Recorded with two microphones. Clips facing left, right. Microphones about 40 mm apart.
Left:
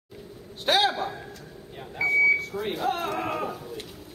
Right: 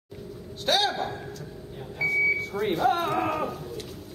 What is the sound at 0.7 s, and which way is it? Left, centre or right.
Speech, centre.